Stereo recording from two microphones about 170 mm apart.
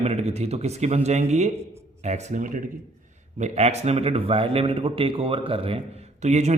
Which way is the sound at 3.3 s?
40° right (ahead or behind).